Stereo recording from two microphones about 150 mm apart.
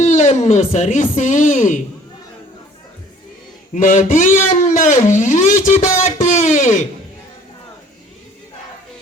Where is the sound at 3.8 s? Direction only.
60° left (ahead or behind).